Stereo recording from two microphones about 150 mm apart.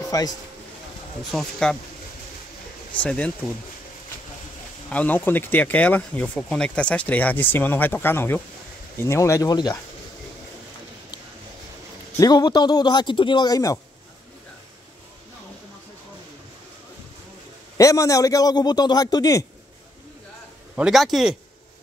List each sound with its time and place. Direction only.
0.1 s a man's voice: 25° left (ahead or behind)
1.3 s a man's voice: 5° left (ahead or behind)
2.9 s speech: 10° left (ahead or behind)
4.8 s a man's voice: 10° left (ahead or behind); by 9.8 s 25° left (ahead or behind)
12.2 s a man's voice: 25° left (ahead or behind)
17.7 s a man's voice: 20° left (ahead or behind)
20.7 s a man's voice: 5° right (ahead or behind)